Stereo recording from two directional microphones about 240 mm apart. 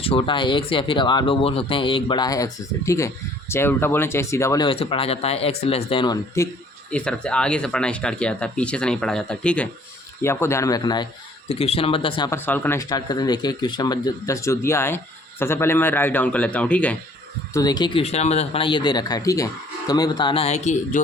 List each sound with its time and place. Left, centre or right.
0.0 s speech: left